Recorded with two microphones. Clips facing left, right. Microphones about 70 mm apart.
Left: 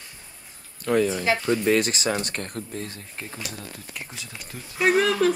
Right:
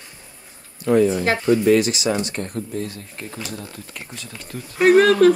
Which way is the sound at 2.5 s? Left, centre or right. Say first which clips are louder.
Right 6 dB; right.